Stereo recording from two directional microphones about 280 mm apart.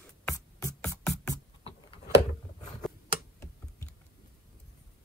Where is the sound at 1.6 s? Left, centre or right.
Left.